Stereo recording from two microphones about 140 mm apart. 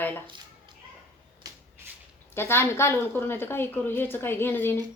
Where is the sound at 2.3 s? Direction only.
15° left (ahead or behind).